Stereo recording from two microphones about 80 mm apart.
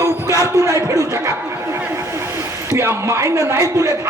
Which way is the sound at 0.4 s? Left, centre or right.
Right.